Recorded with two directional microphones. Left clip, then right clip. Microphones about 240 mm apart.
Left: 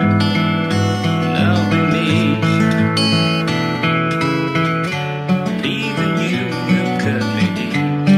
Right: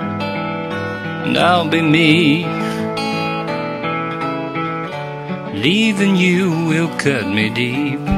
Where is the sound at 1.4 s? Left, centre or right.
Right.